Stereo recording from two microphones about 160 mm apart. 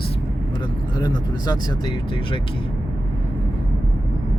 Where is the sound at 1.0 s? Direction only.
25° left (ahead or behind).